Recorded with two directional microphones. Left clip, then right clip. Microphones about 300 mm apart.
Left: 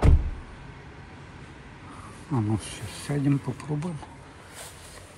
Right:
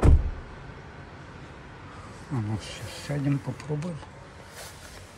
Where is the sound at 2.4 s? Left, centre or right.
Centre.